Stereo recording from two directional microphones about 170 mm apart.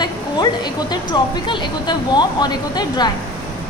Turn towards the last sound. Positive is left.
turn(degrees=25)  # may be behind; listen again after turning